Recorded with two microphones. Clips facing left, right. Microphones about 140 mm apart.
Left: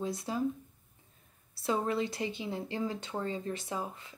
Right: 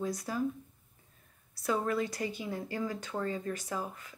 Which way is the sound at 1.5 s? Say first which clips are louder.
Even; 25° left (ahead or behind).